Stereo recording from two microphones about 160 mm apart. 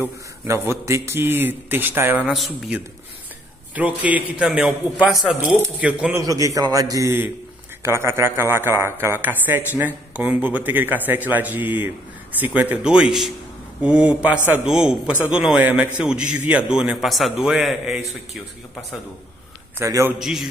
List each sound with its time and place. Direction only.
0.0 s a man's voice: 15° right (ahead or behind)
2.3 s a man's voice: centre (ahead or behind)
6.1 s a man's voice: 20° right (ahead or behind); by 18.4 s centre (ahead or behind)
19.8 s a man's voice: 15° right (ahead or behind)
20.2 s a man's voice: centre (ahead or behind)